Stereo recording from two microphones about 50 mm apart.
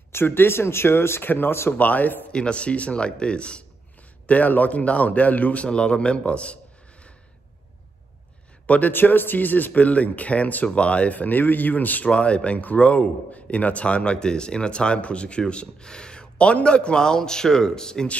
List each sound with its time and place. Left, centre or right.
0.1 s speech: left
1.7 s speech: left
2.3 s speech: left
4.3 s speech: left
5.7 s speech: centre
8.6 s a man's voice: left
8.9 s speech: left
12.1 s speech: left